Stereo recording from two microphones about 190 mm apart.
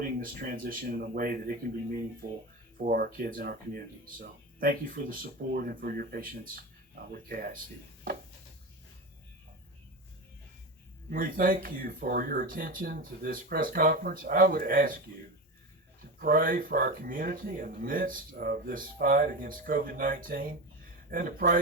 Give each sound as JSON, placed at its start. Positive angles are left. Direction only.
{"t": 0.0, "sound": "speech", "side_deg": -50}
{"t": 11.1, "sound": "speech", "side_deg": -50}
{"t": 16.1, "sound": "speech", "side_deg": -50}